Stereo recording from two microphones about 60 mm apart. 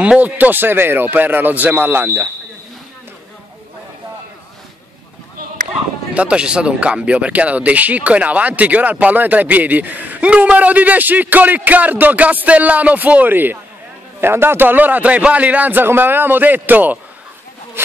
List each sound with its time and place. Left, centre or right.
0.0 s a man's voice: right
6.1 s a man's voice: centre; by 17.9 s right